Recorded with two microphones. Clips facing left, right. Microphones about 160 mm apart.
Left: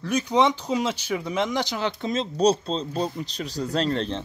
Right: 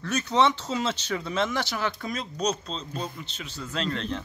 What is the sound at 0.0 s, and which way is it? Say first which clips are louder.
Speech: left 2 dB; 15° left (ahead or behind).